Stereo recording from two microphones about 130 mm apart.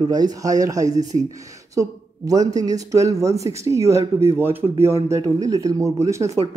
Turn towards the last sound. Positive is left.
turn(degrees=-20)  # may be behind; listen again after turning